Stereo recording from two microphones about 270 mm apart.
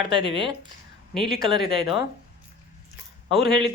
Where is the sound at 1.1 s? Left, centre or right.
Centre.